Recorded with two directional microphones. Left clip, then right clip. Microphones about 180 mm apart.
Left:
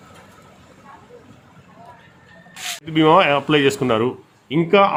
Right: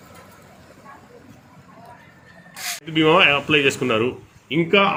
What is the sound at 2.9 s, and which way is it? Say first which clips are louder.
Speech: left 1 dB; 55° left (ahead or behind).